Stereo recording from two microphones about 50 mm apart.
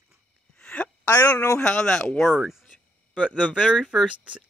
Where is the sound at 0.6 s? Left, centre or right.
Left.